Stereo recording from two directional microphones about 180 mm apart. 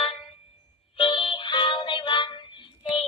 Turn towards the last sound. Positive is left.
turn(degrees=30)  # may be behind; listen again after turning